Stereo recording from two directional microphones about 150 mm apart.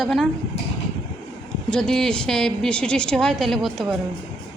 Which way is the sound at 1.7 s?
5° left (ahead or behind).